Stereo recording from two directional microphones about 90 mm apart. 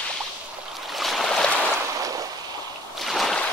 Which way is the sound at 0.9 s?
Centre (ahead or behind).